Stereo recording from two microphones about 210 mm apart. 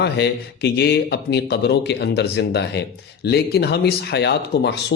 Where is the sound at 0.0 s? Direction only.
50° left (ahead or behind).